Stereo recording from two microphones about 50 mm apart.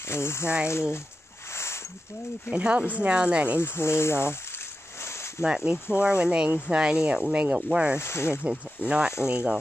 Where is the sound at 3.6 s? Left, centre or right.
Left.